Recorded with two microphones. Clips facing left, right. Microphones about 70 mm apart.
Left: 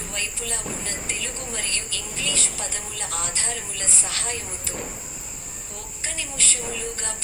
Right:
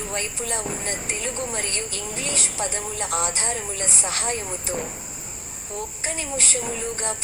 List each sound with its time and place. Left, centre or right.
0.1 s speech: right
6.1 s speech: right